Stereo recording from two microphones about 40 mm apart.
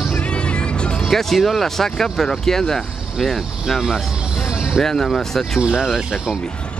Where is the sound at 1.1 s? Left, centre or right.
Centre.